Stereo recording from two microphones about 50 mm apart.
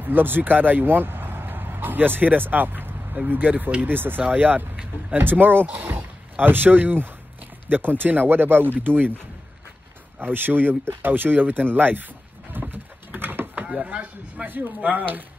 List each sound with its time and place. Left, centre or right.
0.0 s speech: right
10.1 s speech: right
12.5 s a sound: right
13.8 s speech: right
14.4 s speech: right